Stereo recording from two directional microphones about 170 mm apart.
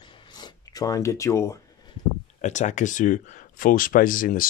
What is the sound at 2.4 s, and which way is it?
Speech, 45° left (ahead or behind).